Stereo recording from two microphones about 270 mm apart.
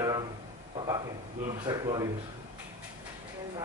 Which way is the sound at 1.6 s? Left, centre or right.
Centre.